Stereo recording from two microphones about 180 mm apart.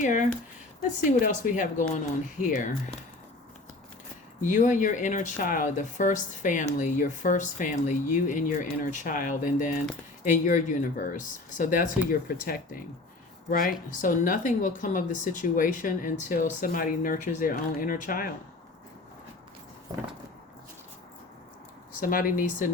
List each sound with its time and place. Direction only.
0.0 s a woman's voice: 45° left (ahead or behind)
4.4 s a woman's voice: 45° left (ahead or behind)
13.5 s a woman's voice: 50° left (ahead or behind)
22.0 s a woman's voice: 50° left (ahead or behind)